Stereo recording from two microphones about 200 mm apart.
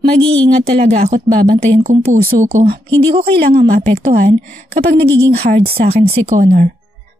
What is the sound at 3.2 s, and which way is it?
A woman's voice, 50° right (ahead or behind).